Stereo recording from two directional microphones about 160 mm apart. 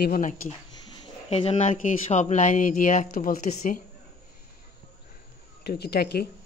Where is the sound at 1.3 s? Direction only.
40° left (ahead or behind); by 3.8 s 60° left (ahead or behind).